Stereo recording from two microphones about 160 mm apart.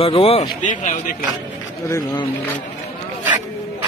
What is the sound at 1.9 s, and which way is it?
Speech, 25° left (ahead or behind).